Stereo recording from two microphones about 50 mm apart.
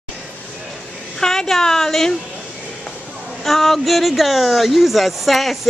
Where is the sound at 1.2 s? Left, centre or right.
Centre.